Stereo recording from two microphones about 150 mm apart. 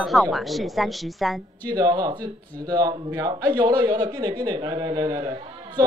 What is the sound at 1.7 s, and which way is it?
A man's voice, 30° right (ahead or behind).